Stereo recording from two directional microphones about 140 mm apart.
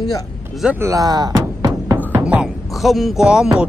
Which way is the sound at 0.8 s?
25° right (ahead or behind).